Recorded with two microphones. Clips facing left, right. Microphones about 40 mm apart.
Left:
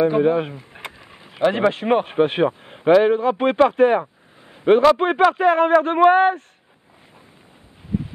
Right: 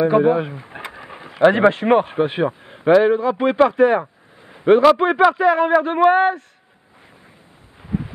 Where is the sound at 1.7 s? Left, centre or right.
Centre.